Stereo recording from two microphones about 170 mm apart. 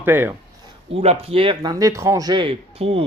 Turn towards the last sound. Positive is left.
turn(degrees=-35)  # may be behind; listen again after turning